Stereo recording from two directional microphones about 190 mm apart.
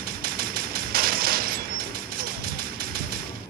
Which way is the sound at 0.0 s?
50° right (ahead or behind).